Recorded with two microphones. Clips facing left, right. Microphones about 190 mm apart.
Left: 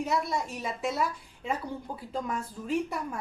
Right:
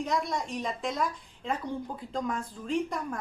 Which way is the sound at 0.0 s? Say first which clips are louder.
Left 1 dB; 5° left (ahead or behind).